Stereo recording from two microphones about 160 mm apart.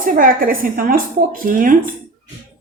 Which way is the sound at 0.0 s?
60° right (ahead or behind).